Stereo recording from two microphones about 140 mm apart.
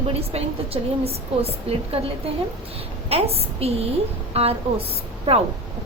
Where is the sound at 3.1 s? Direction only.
45° right (ahead or behind).